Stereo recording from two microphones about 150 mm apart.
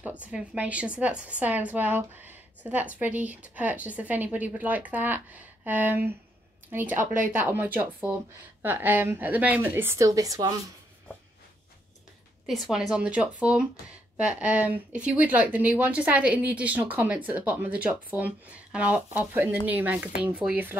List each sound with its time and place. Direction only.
0.2 s a woman's voice: 10° right (ahead or behind)
7.0 s speech: 60° right (ahead or behind)
7.4 s a woman's voice: 10° right (ahead or behind)
12.4 s a woman's voice: 5° right (ahead or behind)